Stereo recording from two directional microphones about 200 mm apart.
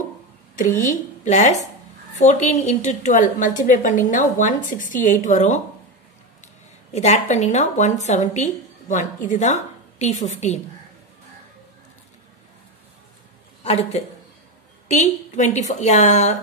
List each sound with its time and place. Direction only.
1.2 s a woman's voice: 35° left (ahead or behind)
6.9 s a woman's voice: 35° left (ahead or behind)
13.7 s a woman's voice: 30° left (ahead or behind)